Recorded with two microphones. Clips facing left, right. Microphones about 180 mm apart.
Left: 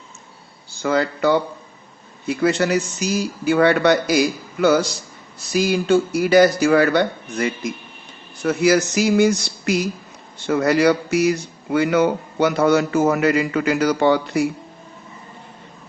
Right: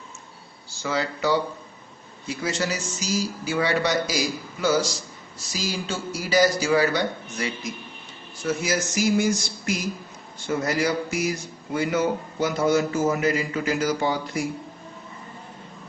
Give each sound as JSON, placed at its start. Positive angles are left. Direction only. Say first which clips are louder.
{"t": 0.7, "sound": "speech", "louder": "left 7 dB", "side_deg": 55}